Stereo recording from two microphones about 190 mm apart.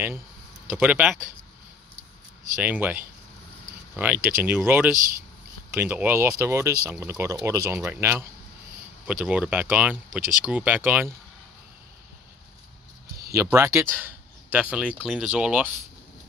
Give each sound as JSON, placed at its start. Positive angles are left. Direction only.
{"t": 0.7, "sound": "speech", "side_deg": -10}
{"t": 2.5, "sound": "speech", "side_deg": -10}
{"t": 13.3, "sound": "speech", "side_deg": -15}